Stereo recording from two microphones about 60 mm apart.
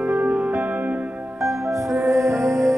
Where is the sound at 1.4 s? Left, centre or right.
Right.